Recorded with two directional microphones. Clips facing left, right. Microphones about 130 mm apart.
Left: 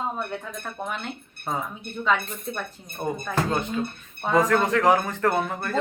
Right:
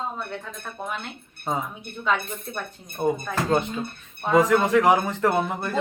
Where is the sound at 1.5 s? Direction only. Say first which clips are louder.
Right 2 dB; 15° right (ahead or behind).